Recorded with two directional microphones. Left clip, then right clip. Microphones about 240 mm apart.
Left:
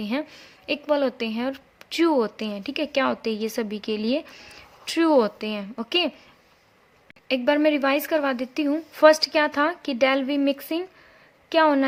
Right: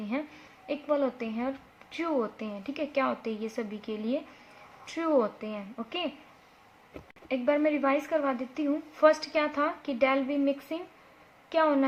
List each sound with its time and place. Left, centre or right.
0.7 s a woman's voice: left
7.3 s a woman's voice: left